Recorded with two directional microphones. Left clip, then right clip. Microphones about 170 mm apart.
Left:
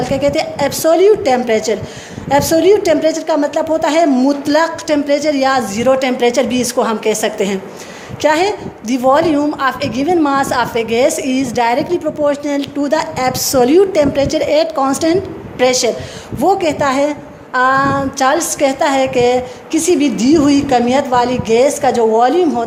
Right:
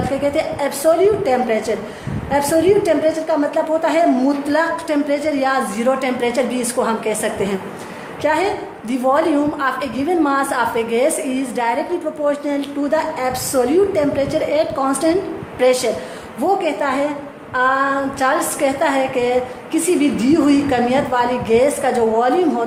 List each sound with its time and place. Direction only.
0.0 s a woman's voice: 45° left (ahead or behind)